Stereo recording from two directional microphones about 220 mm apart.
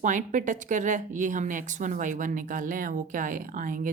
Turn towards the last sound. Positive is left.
turn(degrees=-35)  # may be behind; listen again after turning